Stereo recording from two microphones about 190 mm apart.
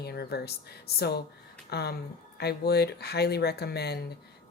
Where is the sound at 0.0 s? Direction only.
55° left (ahead or behind).